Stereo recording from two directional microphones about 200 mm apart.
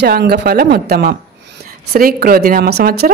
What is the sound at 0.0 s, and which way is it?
Speech, 55° right (ahead or behind).